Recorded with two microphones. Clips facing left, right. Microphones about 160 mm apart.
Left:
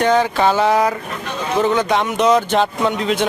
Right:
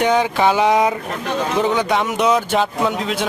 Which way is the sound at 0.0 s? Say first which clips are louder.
Left 1 dB; 10° right (ahead or behind).